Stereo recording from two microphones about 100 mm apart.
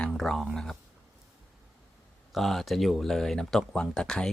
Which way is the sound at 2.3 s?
Centre (ahead or behind).